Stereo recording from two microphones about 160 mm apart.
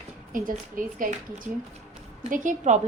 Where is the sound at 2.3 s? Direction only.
55° right (ahead or behind).